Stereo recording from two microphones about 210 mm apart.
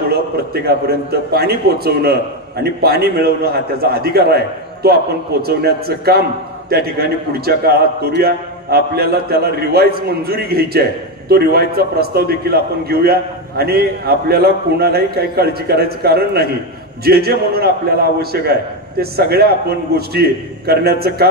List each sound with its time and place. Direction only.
0.1 s a man's voice: 50° right (ahead or behind)